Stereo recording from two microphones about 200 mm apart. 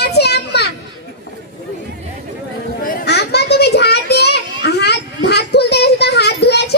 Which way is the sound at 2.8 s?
50° left (ahead or behind).